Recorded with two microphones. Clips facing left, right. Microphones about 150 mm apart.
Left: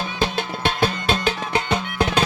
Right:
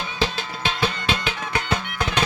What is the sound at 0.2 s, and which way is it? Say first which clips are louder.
Music: left 3 dB; 55° left (ahead or behind).